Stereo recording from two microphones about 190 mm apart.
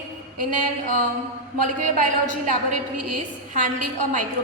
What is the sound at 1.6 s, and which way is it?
A woman's voice, 45° right (ahead or behind).